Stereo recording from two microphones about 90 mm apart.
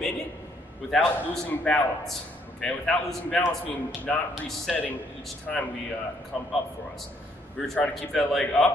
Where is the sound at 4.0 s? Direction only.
15° left (ahead or behind).